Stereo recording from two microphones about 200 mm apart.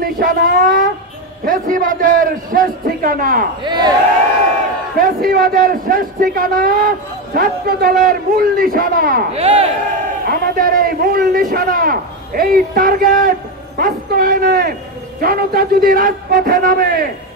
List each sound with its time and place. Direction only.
0.0 s a man's voice: 45° right (ahead or behind)
3.6 s speech: 20° right (ahead or behind)
4.9 s a man's voice: 45° right (ahead or behind)
9.3 s speech: 30° right (ahead or behind)
10.2 s a man's voice: 50° right (ahead or behind)